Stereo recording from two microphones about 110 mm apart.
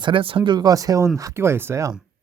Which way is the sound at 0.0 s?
50° right (ahead or behind).